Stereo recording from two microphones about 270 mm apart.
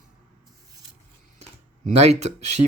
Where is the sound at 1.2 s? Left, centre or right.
Right.